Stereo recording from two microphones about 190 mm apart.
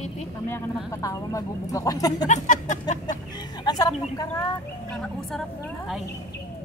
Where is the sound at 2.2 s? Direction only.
40° left (ahead or behind).